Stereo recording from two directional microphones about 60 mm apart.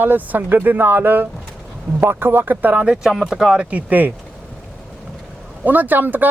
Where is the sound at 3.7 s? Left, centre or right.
Right.